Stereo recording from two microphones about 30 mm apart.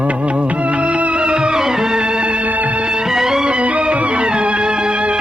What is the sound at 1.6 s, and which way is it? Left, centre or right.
Music, centre.